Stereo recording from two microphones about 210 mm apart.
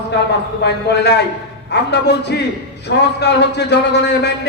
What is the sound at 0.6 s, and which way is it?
A man's voice, 55° left (ahead or behind).